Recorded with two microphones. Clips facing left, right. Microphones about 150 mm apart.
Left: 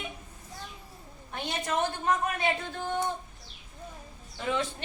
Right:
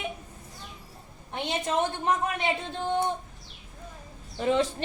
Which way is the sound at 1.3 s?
20° right (ahead or behind).